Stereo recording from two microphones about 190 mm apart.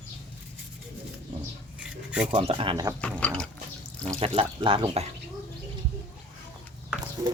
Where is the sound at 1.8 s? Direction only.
5° right (ahead or behind).